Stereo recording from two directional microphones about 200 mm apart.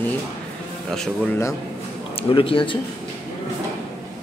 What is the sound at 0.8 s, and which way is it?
Speech, centre (ahead or behind).